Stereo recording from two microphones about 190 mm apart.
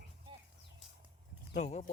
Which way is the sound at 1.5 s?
40° left (ahead or behind).